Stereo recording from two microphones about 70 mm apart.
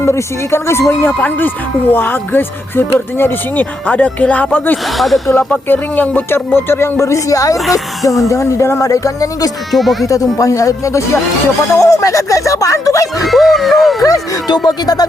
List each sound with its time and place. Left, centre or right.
0.0 s speech: left
4.9 s dog: centre
5.3 s speech: left
9.7 s dog: centre
10.3 s speech: left
13.2 s dog: centre
14.0 s speech: left